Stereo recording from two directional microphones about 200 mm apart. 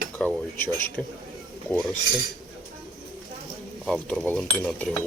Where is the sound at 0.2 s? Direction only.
5° left (ahead or behind).